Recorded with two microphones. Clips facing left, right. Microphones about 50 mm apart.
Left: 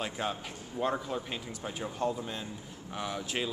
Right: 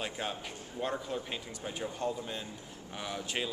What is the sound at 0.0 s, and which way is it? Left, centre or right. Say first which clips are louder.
Speech: left 3 dB; centre.